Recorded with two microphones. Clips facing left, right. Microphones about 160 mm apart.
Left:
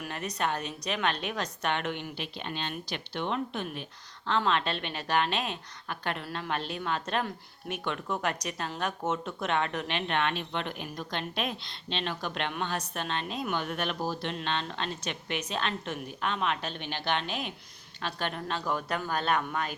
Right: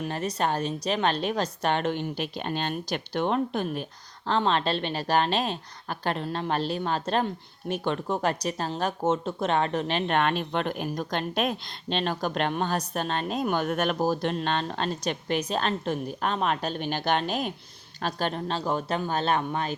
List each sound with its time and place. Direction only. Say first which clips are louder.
0.0 s a woman's voice: right 5 dB; 30° right (ahead or behind)